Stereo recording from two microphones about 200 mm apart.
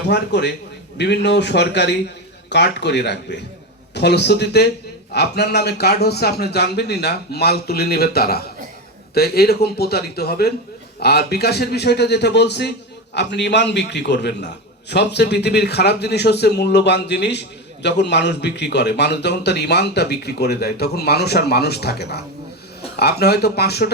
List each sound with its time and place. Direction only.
0.1 s a man's voice: 55° left (ahead or behind)